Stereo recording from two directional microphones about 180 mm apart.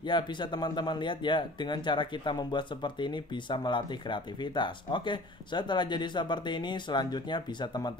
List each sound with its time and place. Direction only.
0.0 s speech: 25° left (ahead or behind)